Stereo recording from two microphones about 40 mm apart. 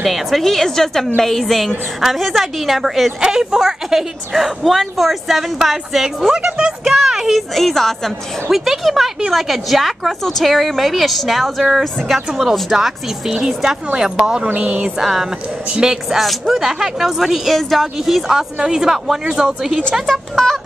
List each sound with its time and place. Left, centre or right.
0.0 s a woman's voice: centre
3.2 s a woman's voice: centre
6.3 s speech: centre
6.8 s a woman's voice: centre
7.5 s a woman's voice: centre
8.5 s a woman's voice: centre
14.5 s a sound: right
15.0 s a woman's voice: centre
16.2 s a woman's voice: centre
18.6 s a woman's voice: centre
19.9 s a woman's voice: centre